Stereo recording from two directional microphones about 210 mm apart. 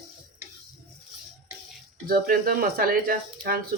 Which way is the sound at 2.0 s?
45° right (ahead or behind).